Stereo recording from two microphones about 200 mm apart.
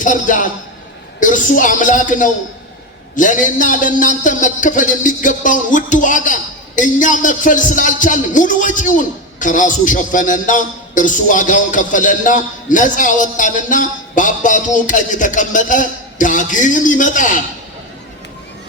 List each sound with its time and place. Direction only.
0.0 s a man's voice: 40° left (ahead or behind)